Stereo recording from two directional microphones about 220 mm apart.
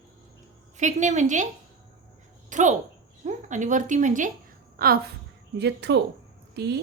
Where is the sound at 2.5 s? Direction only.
35° right (ahead or behind).